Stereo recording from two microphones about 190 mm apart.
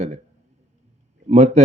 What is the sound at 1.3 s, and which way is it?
Speech, 35° right (ahead or behind).